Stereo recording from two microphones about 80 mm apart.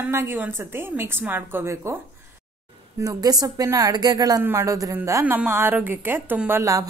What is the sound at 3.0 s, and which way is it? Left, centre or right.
Speech, right.